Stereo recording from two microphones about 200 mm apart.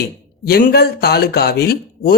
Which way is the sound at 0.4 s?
50° left (ahead or behind).